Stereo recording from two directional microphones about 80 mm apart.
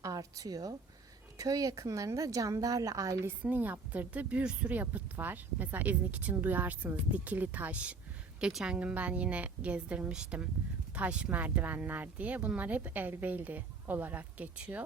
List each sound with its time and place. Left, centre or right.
0.0 s speech: right
3.2 s a woman's voice: right